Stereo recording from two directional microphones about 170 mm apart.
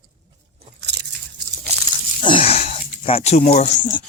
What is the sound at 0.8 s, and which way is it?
Biting, 85° right.